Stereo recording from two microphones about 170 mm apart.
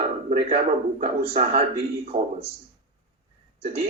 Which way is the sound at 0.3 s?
40° right (ahead or behind).